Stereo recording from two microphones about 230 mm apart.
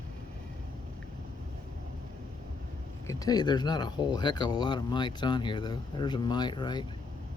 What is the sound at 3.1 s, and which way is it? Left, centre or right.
Speech, centre.